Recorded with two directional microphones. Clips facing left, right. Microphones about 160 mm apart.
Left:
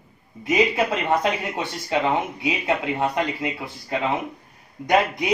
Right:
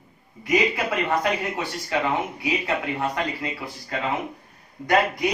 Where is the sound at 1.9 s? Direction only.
20° left (ahead or behind).